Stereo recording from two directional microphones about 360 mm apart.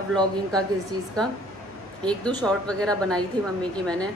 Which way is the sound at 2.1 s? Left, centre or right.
Centre.